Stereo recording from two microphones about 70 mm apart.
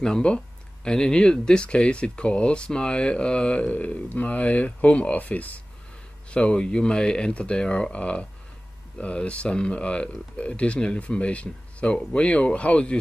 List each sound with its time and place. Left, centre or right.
0.0 s speech: centre